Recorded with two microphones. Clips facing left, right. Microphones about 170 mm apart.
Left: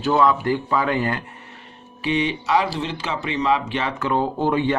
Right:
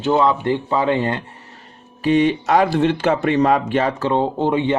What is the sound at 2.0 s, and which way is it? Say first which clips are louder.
Speech: right 7 dB; 45° right (ahead or behind).